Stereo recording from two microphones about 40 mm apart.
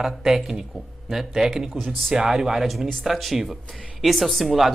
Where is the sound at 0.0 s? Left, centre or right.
Centre.